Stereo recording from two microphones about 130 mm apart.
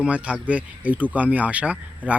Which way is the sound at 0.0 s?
10° right (ahead or behind).